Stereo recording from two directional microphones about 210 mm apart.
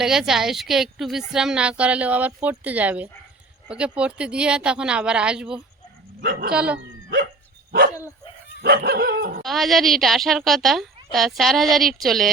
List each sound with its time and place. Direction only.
0.0 s speech: centre (ahead or behind)
7.9 s dog: 15° left (ahead or behind)
8.6 s dog: 50° right (ahead or behind)
9.4 s speech: centre (ahead or behind)